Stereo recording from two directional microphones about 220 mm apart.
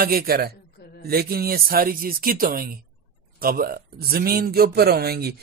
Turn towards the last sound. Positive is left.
turn(degrees=-45)  # may be behind; listen again after turning